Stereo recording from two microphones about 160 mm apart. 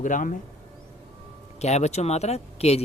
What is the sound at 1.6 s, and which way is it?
Speech, 45° left (ahead or behind).